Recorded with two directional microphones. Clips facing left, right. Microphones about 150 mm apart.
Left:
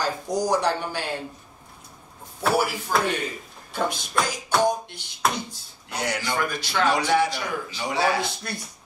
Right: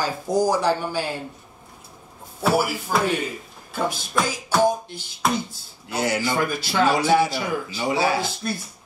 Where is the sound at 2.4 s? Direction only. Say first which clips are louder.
Right 2 dB; 5° right (ahead or behind).